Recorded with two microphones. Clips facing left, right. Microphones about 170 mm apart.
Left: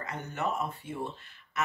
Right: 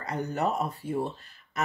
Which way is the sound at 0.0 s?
35° right (ahead or behind).